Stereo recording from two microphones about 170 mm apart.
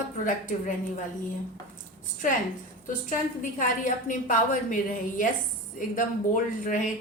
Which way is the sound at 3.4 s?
50° left (ahead or behind).